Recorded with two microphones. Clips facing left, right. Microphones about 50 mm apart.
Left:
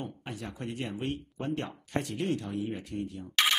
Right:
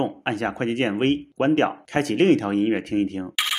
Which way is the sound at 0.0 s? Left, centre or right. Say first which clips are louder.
Right 15 dB; right.